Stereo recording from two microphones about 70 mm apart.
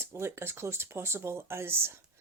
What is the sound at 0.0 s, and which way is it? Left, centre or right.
Speech, right.